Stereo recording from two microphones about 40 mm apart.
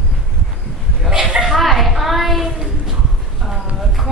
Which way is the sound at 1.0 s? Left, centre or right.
Centre.